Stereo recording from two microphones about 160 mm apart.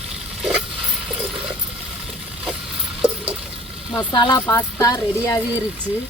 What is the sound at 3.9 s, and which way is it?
Speech, 25° left (ahead or behind).